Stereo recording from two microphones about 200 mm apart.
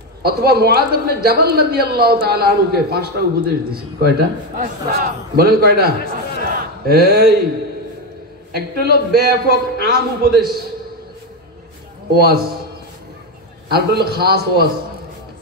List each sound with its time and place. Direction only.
0.2 s a woman's voice: 50° right (ahead or behind)
6.5 s a sound: 50° right (ahead or behind)
8.5 s a woman's voice: 50° right (ahead or behind)
12.1 s a woman's voice: 50° right (ahead or behind)
13.7 s a woman's voice: 50° right (ahead or behind)